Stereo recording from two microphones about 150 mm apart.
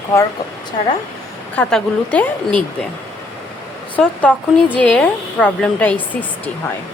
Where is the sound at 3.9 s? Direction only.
10° left (ahead or behind).